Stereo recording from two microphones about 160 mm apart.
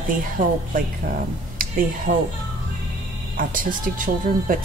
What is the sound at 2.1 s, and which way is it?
Speech, 55° right (ahead or behind).